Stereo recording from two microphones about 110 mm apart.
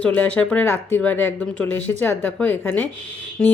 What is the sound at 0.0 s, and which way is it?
Speech, 10° left (ahead or behind).